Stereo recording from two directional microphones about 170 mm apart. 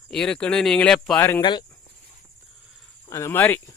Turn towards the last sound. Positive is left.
turn(degrees=10)  # may be behind; listen again after turning